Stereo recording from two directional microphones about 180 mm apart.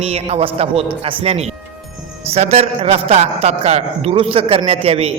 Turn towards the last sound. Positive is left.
turn(degrees=-35)  # may be behind; listen again after turning